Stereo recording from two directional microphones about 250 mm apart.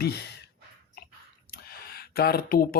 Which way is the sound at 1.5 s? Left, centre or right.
Left.